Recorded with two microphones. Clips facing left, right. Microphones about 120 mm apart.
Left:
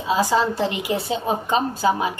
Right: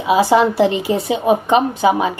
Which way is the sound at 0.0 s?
15° right (ahead or behind).